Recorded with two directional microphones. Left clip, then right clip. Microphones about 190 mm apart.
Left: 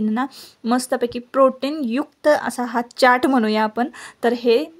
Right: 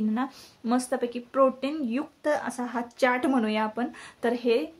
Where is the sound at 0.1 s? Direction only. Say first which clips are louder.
Left 7 dB; 45° left (ahead or behind).